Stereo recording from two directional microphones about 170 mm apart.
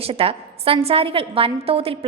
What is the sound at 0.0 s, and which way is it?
A woman's voice, 35° right (ahead or behind).